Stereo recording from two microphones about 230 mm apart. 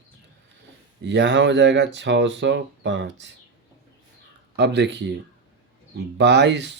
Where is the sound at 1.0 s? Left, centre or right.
Right.